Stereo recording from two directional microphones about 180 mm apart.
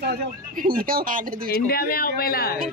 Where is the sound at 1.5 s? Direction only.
60° left (ahead or behind).